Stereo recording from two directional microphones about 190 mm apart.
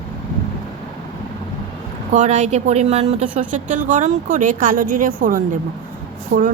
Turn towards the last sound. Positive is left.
turn(degrees=-40)  # may be behind; listen again after turning